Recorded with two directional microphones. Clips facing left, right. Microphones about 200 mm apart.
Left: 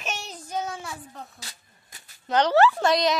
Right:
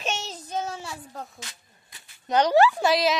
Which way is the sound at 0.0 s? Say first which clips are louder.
Right 3 dB; 25° right (ahead or behind).